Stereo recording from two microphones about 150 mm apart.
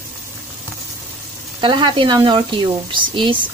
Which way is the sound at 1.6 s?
35° right (ahead or behind).